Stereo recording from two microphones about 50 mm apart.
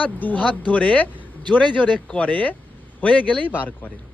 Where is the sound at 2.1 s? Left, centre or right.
Left.